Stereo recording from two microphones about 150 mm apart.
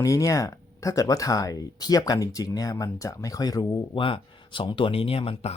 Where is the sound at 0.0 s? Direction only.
20° left (ahead or behind).